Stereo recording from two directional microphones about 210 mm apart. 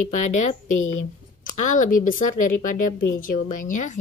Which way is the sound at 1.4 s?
40° left (ahead or behind).